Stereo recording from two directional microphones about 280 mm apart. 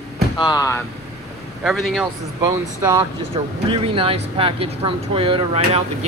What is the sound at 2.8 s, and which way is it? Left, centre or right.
Speech, centre.